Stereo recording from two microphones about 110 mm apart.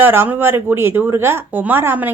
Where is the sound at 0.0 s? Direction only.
20° right (ahead or behind).